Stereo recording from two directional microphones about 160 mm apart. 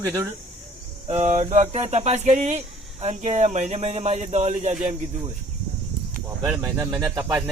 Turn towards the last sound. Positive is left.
turn(degrees=-20)  # may be behind; listen again after turning